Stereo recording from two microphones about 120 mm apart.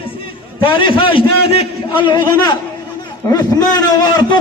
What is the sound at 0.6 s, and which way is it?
A man's voice, 45° left (ahead or behind).